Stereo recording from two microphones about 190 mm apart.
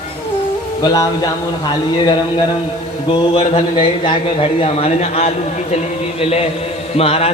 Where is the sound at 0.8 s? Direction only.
20° left (ahead or behind).